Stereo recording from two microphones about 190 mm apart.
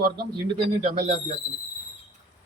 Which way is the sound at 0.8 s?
35° right (ahead or behind).